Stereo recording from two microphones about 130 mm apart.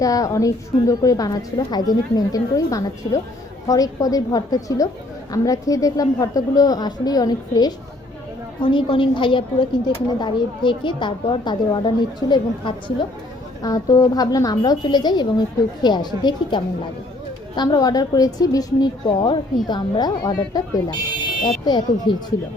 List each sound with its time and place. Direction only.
0.0 s a woman's voice: 25° left (ahead or behind)
13.6 s a woman's voice: 25° left (ahead or behind)